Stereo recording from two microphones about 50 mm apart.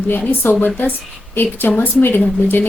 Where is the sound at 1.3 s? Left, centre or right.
Left.